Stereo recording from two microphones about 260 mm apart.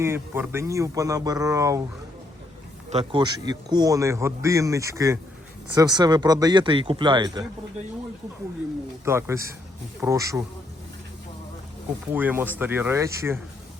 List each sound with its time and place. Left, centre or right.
0.0 s a man's voice: centre
2.9 s a man's voice: right
9.0 s a man's voice: centre
12.1 s a man's voice: centre